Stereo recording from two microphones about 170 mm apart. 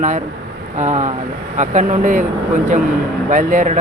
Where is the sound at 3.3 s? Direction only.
50° right (ahead or behind).